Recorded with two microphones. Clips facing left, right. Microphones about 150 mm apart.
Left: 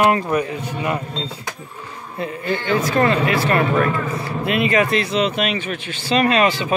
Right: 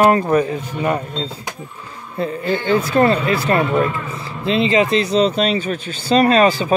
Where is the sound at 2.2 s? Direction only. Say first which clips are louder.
Right 3 dB; 35° right (ahead or behind).